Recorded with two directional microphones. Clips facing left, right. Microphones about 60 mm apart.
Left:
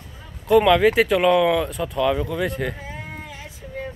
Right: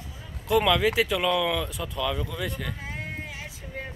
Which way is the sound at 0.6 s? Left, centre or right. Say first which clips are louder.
Left 7 dB; left.